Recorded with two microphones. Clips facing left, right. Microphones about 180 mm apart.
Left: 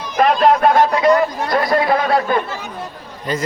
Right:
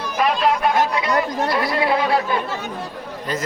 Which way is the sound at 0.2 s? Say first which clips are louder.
Left 6 dB; 50° left (ahead or behind).